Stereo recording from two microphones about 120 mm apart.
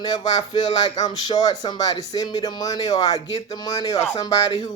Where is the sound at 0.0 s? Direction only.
35° left (ahead or behind).